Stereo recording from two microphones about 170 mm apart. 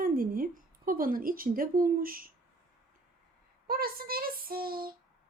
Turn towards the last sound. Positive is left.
turn(degrees=-60)  # may be behind; listen again after turning